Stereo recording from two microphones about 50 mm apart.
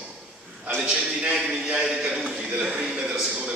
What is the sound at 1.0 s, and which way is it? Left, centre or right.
Speech, centre.